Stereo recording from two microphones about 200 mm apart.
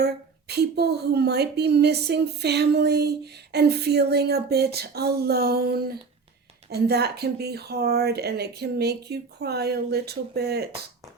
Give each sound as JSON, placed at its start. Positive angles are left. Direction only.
{"t": 0.0, "sound": "a woman's voice", "side_deg": -55}